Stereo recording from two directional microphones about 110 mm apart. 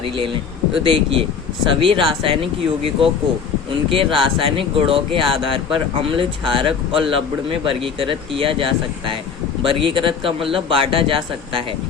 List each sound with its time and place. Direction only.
0.9 s speech: 55° right (ahead or behind)
9.6 s speech: 50° right (ahead or behind)